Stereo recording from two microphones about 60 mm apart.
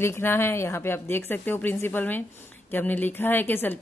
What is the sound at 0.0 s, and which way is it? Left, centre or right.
A woman's voice, left.